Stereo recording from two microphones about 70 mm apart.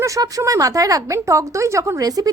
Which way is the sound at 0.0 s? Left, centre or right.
Right.